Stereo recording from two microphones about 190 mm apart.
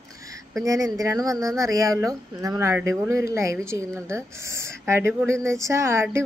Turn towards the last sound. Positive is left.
turn(degrees=-15)  # may be behind; listen again after turning